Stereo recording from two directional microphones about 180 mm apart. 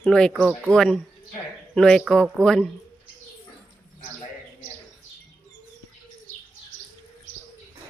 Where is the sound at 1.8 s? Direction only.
5° left (ahead or behind).